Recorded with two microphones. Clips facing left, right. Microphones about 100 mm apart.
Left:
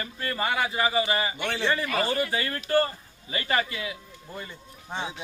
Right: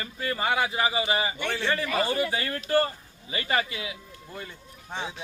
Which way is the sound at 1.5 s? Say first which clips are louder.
Left 2 dB; centre (ahead or behind).